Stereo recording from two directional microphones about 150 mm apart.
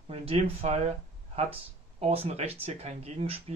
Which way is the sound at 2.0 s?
45° right (ahead or behind).